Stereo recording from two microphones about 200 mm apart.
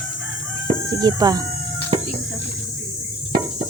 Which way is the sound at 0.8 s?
20° right (ahead or behind).